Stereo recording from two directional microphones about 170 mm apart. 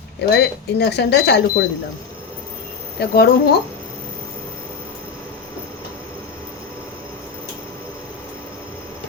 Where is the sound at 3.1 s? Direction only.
55° left (ahead or behind).